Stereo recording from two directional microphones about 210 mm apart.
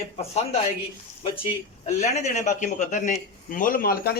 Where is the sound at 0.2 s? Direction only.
30° left (ahead or behind).